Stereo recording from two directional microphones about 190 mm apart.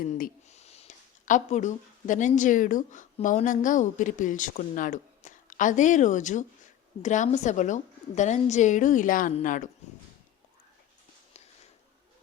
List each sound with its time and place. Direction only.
0.0 s a woman's voice: 40° left (ahead or behind)